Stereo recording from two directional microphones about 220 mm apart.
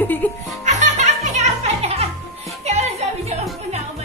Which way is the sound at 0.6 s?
30° right (ahead or behind).